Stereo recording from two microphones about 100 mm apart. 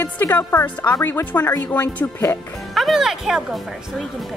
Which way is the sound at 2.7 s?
Centre (ahead or behind).